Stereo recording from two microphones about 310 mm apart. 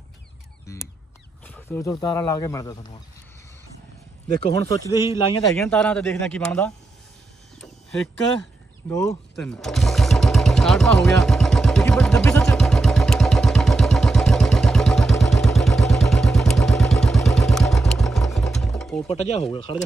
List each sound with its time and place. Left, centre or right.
1.4 s speech: centre
4.4 s speech: centre
5.5 s speech: centre
7.5 s a sound: centre
8.9 s lawn mower: centre
19.0 s speech: left